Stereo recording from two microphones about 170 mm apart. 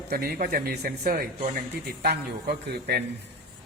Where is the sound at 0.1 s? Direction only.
60° right (ahead or behind).